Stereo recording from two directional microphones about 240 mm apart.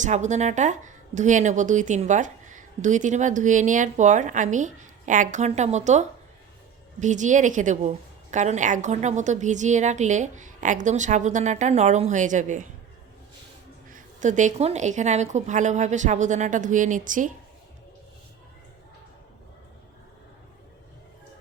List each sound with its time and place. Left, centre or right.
0.0 s speech: right
13.9 s speech: right